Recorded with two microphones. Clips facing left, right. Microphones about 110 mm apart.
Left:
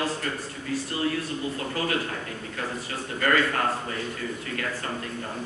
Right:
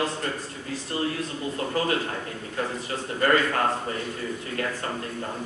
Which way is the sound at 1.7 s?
30° right (ahead or behind).